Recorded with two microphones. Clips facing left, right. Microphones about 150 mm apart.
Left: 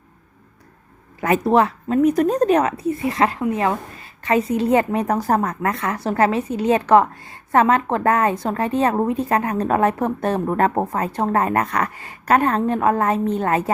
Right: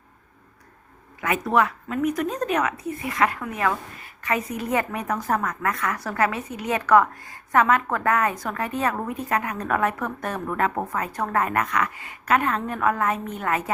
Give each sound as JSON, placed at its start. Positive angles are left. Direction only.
{"t": 1.2, "sound": "a woman's voice", "side_deg": 35}